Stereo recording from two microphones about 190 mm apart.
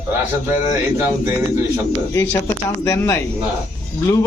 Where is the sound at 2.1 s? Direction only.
10° left (ahead or behind).